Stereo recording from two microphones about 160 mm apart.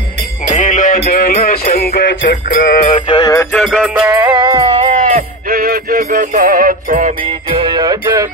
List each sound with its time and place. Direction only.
0.6 s music: 50° left (ahead or behind)
2.9 s music: 30° left (ahead or behind)
3.5 s music: centre (ahead or behind)
4.3 s music: 25° right (ahead or behind)
4.9 s music: 50° right (ahead or behind)
7.5 s music: 25° right (ahead or behind)